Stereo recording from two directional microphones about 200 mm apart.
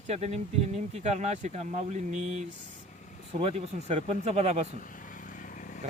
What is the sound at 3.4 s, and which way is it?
Speech, 30° right (ahead or behind).